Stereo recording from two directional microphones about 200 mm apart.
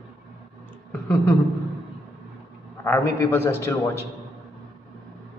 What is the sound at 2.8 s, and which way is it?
A man's voice, 10° left (ahead or behind).